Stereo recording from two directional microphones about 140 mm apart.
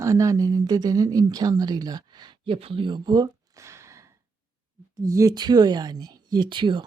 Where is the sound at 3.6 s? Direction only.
20° right (ahead or behind).